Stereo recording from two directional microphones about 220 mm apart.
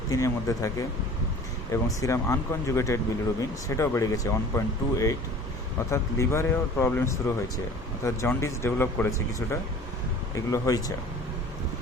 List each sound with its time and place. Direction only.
0.1 s speech: 15° left (ahead or behind)